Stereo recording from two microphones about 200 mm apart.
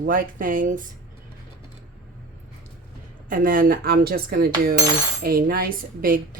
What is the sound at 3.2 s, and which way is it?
Speech, 45° right (ahead or behind).